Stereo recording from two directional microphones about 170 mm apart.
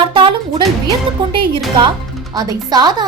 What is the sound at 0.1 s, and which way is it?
Music, 30° right (ahead or behind).